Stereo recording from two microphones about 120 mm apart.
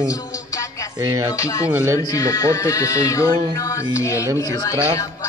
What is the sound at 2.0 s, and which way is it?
Speech, 30° left (ahead or behind).